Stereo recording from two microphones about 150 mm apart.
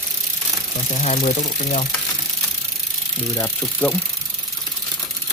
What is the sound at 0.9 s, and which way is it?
Speech, 45° left (ahead or behind).